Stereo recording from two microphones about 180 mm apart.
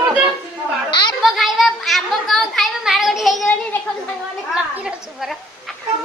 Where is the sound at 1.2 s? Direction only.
Centre (ahead or behind).